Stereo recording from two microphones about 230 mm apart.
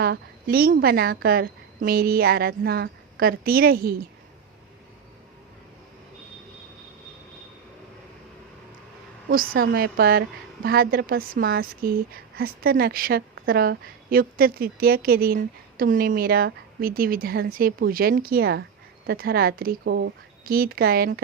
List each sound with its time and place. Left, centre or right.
0.0 s a woman's voice: right
9.6 s a woman's voice: right